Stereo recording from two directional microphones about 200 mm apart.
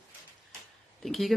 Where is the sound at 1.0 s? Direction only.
Centre (ahead or behind).